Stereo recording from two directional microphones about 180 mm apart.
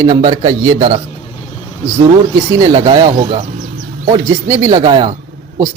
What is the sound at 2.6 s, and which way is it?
Speech, 25° right (ahead or behind).